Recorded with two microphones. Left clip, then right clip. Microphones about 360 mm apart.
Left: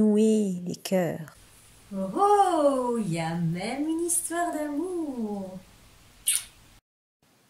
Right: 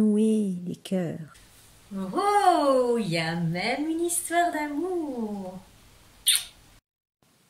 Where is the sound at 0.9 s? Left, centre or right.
Left.